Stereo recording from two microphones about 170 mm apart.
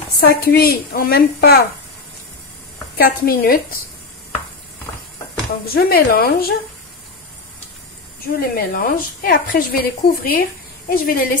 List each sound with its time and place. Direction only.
0.2 s a woman's voice: 70° left (ahead or behind)
3.0 s a woman's voice: 60° left (ahead or behind)
5.8 s a woman's voice: 65° left (ahead or behind)
8.4 s a woman's voice: 60° left (ahead or behind)